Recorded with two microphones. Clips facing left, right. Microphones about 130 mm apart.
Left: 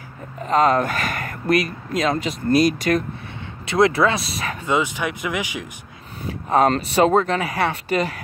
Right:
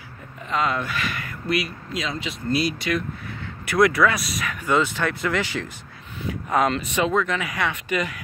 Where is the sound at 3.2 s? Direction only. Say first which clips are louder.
Even; 25° left (ahead or behind).